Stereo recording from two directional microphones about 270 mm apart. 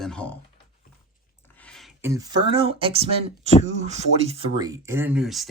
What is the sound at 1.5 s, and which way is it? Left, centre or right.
Speech, centre.